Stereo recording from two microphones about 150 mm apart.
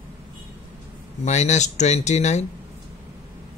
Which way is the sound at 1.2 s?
50° left (ahead or behind).